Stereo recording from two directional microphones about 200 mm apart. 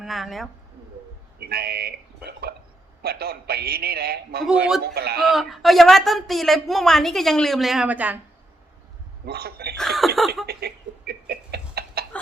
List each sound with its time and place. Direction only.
0.0 s speech: centre (ahead or behind)
1.4 s a man's voice: 50° right (ahead or behind)
5.2 s speech: centre (ahead or behind)
9.2 s a man's voice: 50° right (ahead or behind)
9.7 s speech: centre (ahead or behind)
10.4 s chicken: 50° right (ahead or behind)